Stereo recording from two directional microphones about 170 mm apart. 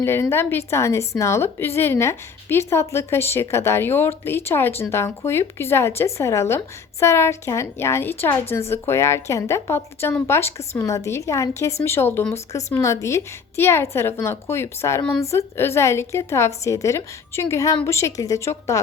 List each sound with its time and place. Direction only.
0.0 s a woman's voice: 15° left (ahead or behind)